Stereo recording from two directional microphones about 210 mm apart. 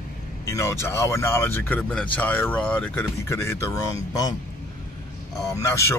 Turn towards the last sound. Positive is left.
turn(degrees=15)  # may be behind; listen again after turning